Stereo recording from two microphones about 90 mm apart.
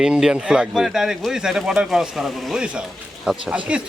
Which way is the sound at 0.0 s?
5° right (ahead or behind).